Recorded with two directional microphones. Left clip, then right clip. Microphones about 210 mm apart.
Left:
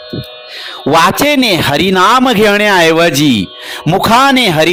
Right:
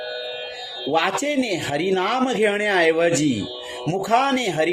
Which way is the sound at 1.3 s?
50° left (ahead or behind).